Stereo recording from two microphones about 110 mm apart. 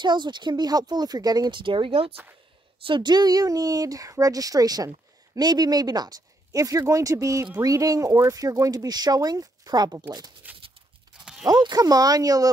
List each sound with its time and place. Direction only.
0.0 s speech: 45° right (ahead or behind); by 2.1 s 60° right (ahead or behind)
2.8 s speech: 45° right (ahead or behind)
10.4 s dog: 15° right (ahead or behind)
11.4 s speech: 35° right (ahead or behind)